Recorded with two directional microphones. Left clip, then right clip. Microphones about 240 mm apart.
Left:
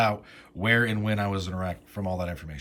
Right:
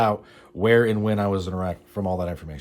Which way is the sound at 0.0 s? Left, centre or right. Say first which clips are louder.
Right 3 dB; centre.